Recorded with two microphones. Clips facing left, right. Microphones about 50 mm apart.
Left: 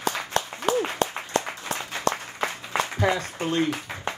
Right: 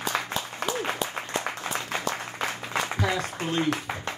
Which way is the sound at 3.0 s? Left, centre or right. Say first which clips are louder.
Left 5 dB; left.